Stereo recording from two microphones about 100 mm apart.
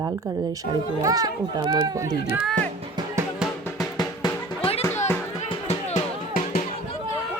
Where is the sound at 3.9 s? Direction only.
45° left (ahead or behind).